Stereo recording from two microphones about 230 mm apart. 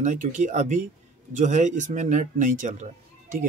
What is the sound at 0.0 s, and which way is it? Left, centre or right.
Speech, right.